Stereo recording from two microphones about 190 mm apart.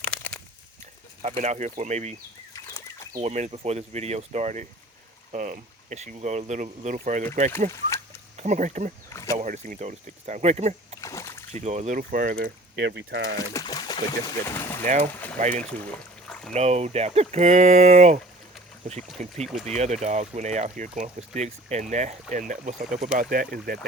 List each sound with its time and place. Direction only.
0.0 s a sound: 5° left (ahead or behind)
1.2 s speech: 35° right (ahead or behind)
3.2 s speech: 35° right (ahead or behind)
9.0 s a sound: 15° left (ahead or behind)
9.4 s speech: 40° right (ahead or behind)
11.0 s splash: 15° left (ahead or behind)
11.5 s speech: 35° right (ahead or behind)
12.7 s speech: 65° right (ahead or behind)
13.3 s speech: 20° left (ahead or behind)
16.2 s a sound: 5° left (ahead or behind)
16.6 s speech: 35° right (ahead or behind)
19.5 s speech: centre (ahead or behind)
19.7 s speech: 35° right (ahead or behind); by 23.8 s 50° right (ahead or behind)